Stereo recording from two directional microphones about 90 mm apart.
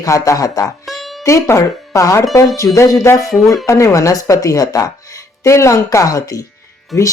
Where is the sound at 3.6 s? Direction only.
35° left (ahead or behind).